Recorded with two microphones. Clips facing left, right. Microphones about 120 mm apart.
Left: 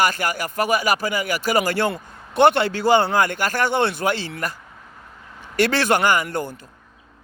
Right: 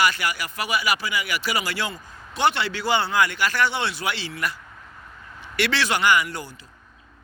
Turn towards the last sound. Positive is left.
turn(degrees=50)  # may be behind; listen again after turning